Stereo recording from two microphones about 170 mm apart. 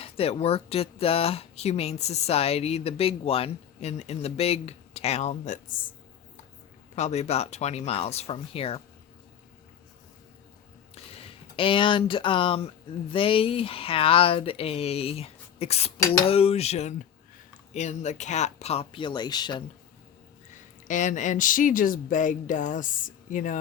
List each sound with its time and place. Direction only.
0.0 s speech: 35° left (ahead or behind)
6.9 s speech: 40° left (ahead or behind)
10.9 s speech: 35° left (ahead or behind)
20.8 s speech: 50° left (ahead or behind)